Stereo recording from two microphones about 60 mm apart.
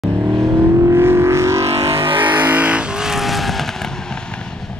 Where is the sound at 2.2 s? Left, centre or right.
Right.